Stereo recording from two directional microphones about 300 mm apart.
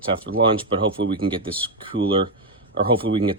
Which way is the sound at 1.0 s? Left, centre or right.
Right.